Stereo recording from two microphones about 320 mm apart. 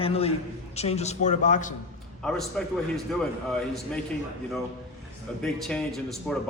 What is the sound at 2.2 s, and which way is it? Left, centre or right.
Speech, centre.